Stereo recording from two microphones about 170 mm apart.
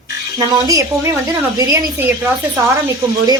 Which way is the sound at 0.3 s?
20° right (ahead or behind).